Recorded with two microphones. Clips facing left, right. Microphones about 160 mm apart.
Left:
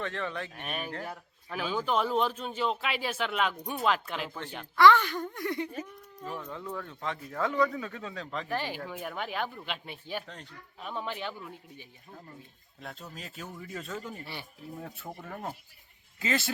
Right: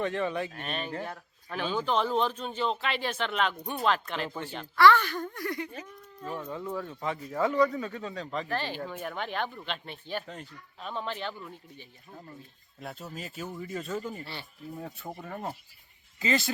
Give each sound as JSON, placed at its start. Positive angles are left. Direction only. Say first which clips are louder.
{"t": 0.0, "sound": "speech", "louder": "right 5 dB", "side_deg": -15}
{"t": 0.5, "sound": "a man's voice", "louder": "right 2 dB", "side_deg": 10}
{"t": 4.8, "sound": "speech", "louder": "even", "side_deg": 15}
{"t": 5.7, "sound": "a man's voice", "louder": "left 3 dB", "side_deg": 0}
{"t": 8.4, "sound": "a man's voice", "louder": "right 1 dB", "side_deg": 15}
{"t": 12.8, "sound": "a man's voice", "louder": "right 4 dB", "side_deg": -5}